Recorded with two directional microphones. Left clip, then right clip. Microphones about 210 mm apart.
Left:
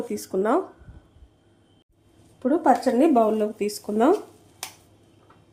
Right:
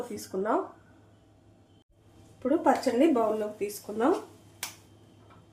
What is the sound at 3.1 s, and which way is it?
Speech, 50° left (ahead or behind).